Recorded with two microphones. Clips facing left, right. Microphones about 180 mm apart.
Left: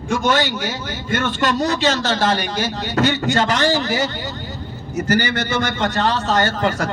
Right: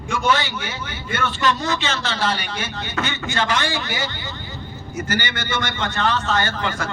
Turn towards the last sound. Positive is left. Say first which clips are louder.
# left 5 dB
turn(degrees=40)  # may be behind; listen again after turning